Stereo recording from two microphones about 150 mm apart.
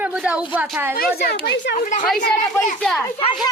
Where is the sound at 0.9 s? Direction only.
90° left; by 2.1 s 60° left (ahead or behind).